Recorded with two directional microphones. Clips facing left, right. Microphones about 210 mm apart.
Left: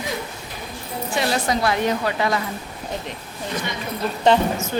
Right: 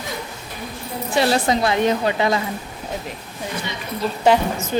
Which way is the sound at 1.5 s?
20° right (ahead or behind).